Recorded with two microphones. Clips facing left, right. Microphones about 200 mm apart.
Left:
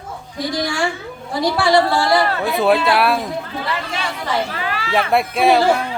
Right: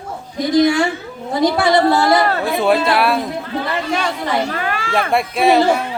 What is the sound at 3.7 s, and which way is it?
Speech, 50° right (ahead or behind).